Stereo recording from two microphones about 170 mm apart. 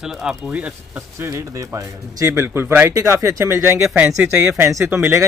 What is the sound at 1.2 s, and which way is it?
Speech, 15° right (ahead or behind).